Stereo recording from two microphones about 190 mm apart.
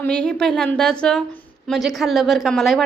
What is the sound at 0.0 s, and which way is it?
A woman's voice, 5° left (ahead or behind).